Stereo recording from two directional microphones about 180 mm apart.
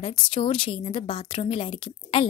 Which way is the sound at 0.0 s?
30° left (ahead or behind).